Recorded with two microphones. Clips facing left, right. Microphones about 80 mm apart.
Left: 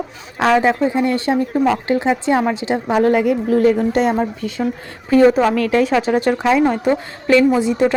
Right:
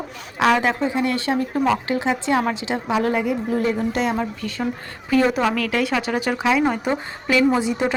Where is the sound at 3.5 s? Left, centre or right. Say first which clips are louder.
Left 8 dB; left.